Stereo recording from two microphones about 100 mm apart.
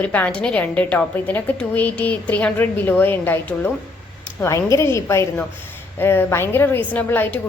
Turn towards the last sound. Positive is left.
turn(degrees=15)  # may be behind; listen again after turning